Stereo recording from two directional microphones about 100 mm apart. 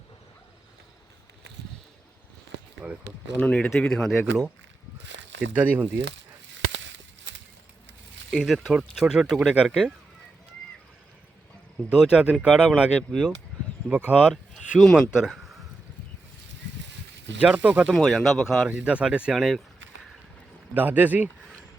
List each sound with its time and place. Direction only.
2.8 s speech: 10° right (ahead or behind)
3.4 s speech: 10° left (ahead or behind)
5.5 s speech: 15° right (ahead or behind)
8.3 s speech: 5° right (ahead or behind)
11.9 s speech: 10° right (ahead or behind)
13.0 s speech: 5° left (ahead or behind)
13.8 s speech: 15° right (ahead or behind)
14.8 s speech: centre (ahead or behind)
17.4 s speech: 15° right (ahead or behind)
17.9 s speech: centre (ahead or behind)
18.7 s speech: 10° right (ahead or behind)
20.7 s speech: 15° right (ahead or behind)